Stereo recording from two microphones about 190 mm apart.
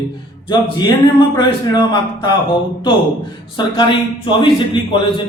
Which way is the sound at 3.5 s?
25° left (ahead or behind).